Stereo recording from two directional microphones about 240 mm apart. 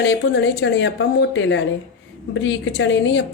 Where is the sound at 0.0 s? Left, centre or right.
Left.